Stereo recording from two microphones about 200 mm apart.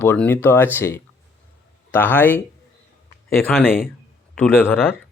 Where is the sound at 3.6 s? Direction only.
45° left (ahead or behind).